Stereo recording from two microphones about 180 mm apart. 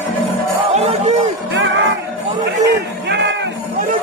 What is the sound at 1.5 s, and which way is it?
Music, 90° right.